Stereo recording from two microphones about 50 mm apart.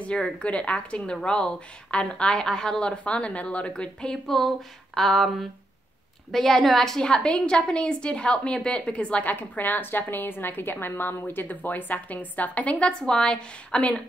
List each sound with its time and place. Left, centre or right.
0.0 s a woman's voice: left
4.3 s a sound: centre
6.3 s a woman's voice: centre; by 9.3 s left
9.3 s a woman's voice: left